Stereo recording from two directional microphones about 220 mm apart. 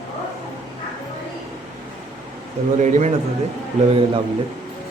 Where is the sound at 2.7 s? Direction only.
35° right (ahead or behind).